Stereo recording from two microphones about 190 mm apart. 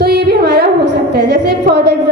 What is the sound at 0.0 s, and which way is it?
Music, 55° right (ahead or behind).